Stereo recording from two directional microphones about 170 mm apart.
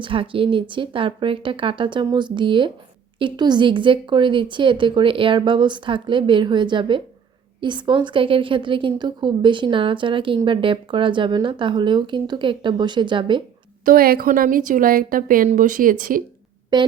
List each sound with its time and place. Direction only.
0.0 s a woman's voice: 30° right (ahead or behind)
13.8 s a woman's voice: 60° right (ahead or behind)
16.7 s a woman's voice: 25° right (ahead or behind)